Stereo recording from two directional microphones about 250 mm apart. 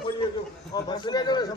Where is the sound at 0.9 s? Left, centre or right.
Centre.